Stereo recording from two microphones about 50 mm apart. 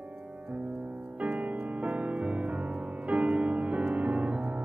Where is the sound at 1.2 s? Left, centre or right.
Right.